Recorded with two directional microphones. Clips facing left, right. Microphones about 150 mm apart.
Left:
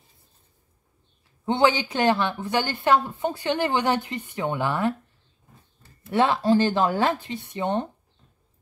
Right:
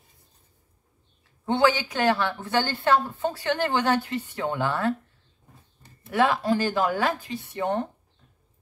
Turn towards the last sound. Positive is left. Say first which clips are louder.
# left 1 dB
turn(degrees=20)  # may be behind; listen again after turning